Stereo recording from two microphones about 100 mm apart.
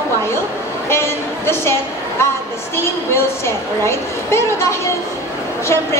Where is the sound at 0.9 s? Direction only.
25° left (ahead or behind).